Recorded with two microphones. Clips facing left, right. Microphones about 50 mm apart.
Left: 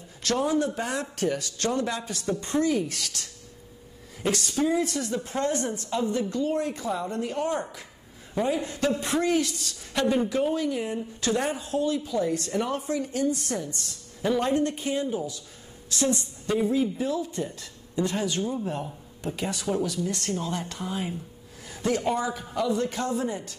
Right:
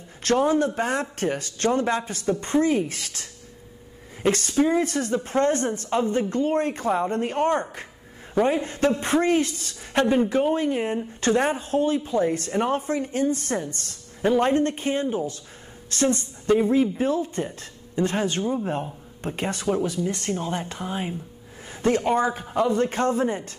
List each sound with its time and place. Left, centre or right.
0.2 s speech: right
21.6 s a sound: right
22.1 s speech: right